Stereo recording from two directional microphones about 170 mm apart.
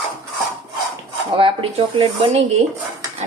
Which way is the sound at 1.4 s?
30° right (ahead or behind).